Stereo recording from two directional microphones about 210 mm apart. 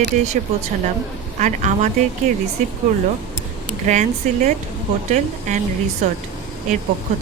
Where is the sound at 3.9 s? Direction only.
35° right (ahead or behind).